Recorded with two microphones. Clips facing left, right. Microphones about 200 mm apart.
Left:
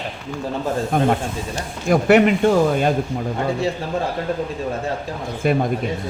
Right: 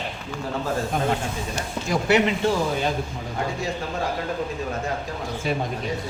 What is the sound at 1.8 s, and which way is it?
Speech, 55° left (ahead or behind).